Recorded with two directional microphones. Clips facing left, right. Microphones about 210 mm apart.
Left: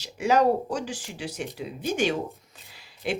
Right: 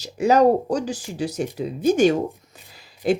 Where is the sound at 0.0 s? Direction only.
40° right (ahead or behind).